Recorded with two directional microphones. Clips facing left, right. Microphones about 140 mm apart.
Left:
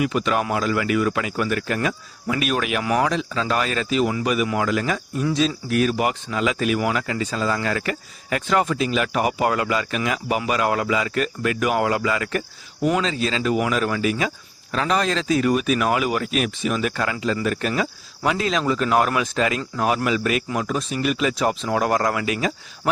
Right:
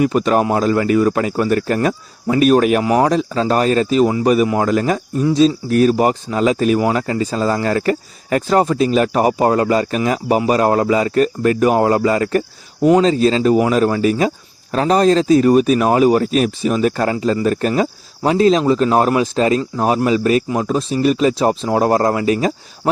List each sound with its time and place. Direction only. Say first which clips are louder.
0.0 s speech: right 7 dB; 40° right (ahead or behind)